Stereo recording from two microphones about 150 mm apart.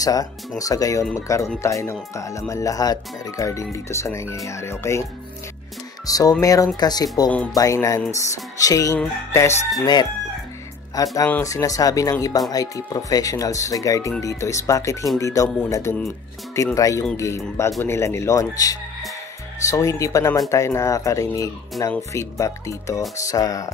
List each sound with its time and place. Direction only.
0.0 s speech: 25° left (ahead or behind)
6.0 s speech: 25° left (ahead or behind)
8.9 s music: 15° left (ahead or behind)
11.2 s speech: 15° left (ahead or behind)